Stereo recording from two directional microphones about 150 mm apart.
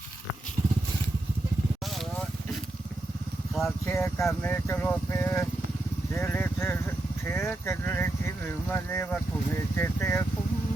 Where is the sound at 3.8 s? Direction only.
15° left (ahead or behind).